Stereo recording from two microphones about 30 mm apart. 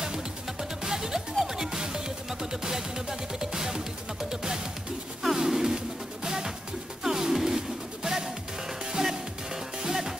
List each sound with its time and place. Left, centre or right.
0.0 s music: right
5.2 s a sound: centre
6.2 s music: right